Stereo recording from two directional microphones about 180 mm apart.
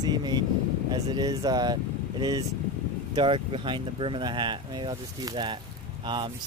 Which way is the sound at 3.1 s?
25° right (ahead or behind).